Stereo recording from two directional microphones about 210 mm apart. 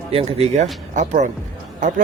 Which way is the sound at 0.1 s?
30° right (ahead or behind).